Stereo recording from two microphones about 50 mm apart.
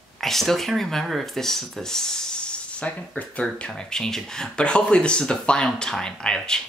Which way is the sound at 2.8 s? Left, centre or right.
Left.